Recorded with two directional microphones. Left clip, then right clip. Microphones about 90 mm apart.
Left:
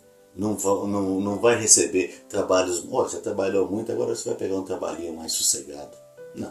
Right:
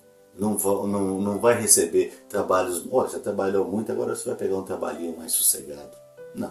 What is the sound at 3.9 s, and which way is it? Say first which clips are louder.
Speech: left 1 dB; 15° right (ahead or behind).